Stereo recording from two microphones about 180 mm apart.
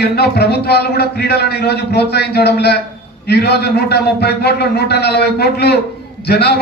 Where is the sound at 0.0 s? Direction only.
65° left (ahead or behind).